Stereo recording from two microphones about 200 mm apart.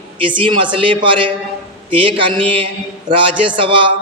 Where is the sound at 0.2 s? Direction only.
25° right (ahead or behind).